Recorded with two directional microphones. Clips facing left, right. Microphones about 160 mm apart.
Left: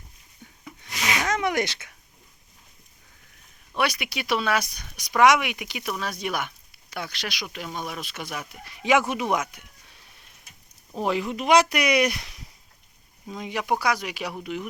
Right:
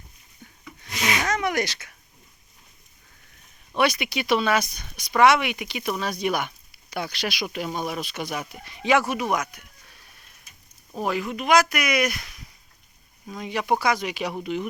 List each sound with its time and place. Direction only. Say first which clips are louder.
0.8 s rub: right 2 dB; 20° left (ahead or behind)
3.8 s speech: right 4 dB; 5° left (ahead or behind)
8.9 s speech: even; 20° left (ahead or behind)
9.6 s a sound: even; 25° left (ahead or behind)
11.0 s speech: left 1 dB; 25° left (ahead or behind)
13.2 s speech: right 2 dB; 20° left (ahead or behind); by 14.7 s 5° left (ahead or behind)